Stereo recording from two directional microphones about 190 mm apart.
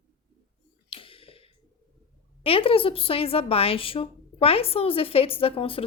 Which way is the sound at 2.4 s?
30° left (ahead or behind).